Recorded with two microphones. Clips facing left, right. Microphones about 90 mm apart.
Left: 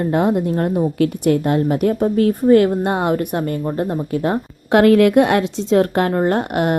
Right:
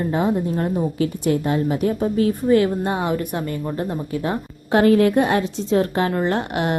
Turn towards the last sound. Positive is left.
turn(degrees=45)  # may be behind; listen again after turning